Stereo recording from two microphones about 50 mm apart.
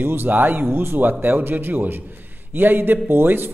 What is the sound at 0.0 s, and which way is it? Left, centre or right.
Speech, right.